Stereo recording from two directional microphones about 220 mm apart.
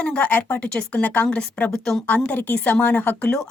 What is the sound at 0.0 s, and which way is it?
A woman's voice, 5° left (ahead or behind).